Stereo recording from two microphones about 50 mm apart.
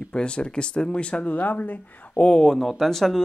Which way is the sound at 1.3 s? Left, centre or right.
Left.